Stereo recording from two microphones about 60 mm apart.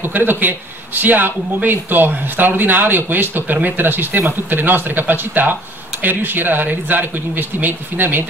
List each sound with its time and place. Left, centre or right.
0.0 s speech: right